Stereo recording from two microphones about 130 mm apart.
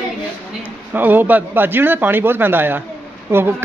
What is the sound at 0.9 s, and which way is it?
Speech, 15° right (ahead or behind).